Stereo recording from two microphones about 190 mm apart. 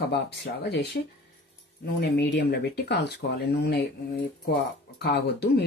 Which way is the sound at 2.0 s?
60° left (ahead or behind).